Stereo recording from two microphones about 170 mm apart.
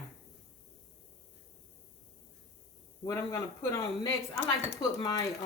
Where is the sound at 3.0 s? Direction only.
20° left (ahead or behind).